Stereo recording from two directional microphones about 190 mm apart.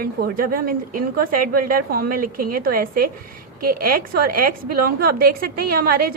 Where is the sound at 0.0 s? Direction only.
50° right (ahead or behind).